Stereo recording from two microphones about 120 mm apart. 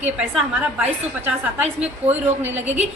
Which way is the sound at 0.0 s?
10° right (ahead or behind).